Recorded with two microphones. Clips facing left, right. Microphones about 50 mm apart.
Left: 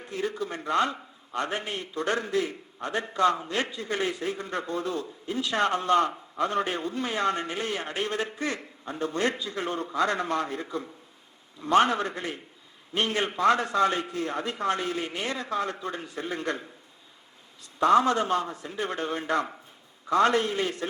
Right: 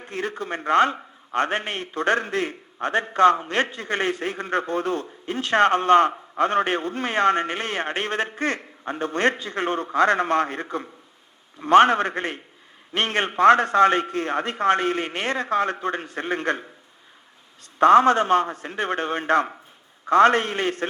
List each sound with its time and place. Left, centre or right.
0.0 s a man's voice: right
17.7 s a man's voice: right